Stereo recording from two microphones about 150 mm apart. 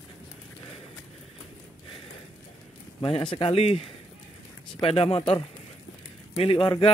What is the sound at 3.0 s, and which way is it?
A man's voice, 35° left (ahead or behind).